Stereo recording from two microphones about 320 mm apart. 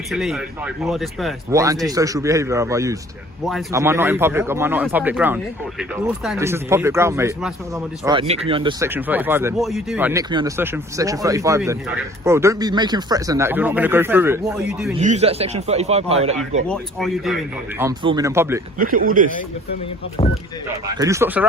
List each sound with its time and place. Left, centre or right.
0.1 s speech: centre
15.0 s speech: centre
16.6 s speech: centre
17.7 s speech: centre
18.8 s speech: right
21.0 s speech: centre